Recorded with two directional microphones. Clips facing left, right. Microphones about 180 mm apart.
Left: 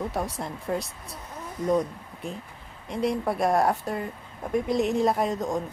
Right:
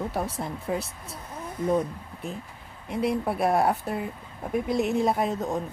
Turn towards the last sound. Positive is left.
turn(degrees=-5)  # may be behind; listen again after turning